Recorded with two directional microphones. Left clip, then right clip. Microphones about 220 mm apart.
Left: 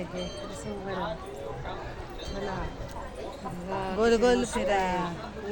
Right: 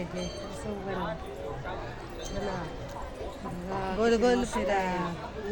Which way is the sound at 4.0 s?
20° left (ahead or behind).